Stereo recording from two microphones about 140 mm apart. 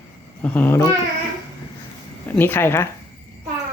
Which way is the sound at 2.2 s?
15° left (ahead or behind).